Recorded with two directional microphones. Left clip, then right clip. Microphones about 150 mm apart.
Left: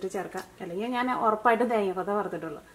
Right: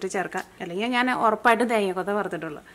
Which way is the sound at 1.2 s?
45° right (ahead or behind).